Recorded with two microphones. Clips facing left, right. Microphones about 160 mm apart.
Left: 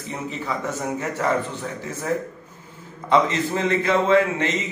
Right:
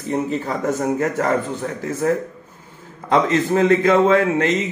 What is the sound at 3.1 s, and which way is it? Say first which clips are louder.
A man's voice: right 3 dB; 45° right (ahead or behind).